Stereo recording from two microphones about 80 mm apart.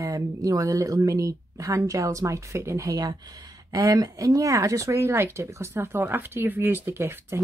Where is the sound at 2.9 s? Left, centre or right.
Right.